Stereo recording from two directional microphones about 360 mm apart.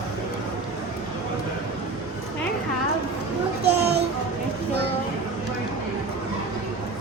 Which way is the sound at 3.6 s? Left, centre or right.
Right.